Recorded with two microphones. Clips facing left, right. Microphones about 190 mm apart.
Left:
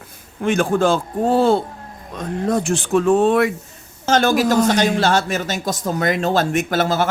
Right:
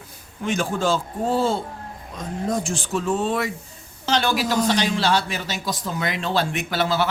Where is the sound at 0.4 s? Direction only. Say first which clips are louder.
Left 6 dB; 55° left (ahead or behind).